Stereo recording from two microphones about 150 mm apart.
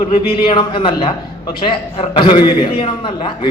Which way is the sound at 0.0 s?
30° left (ahead or behind).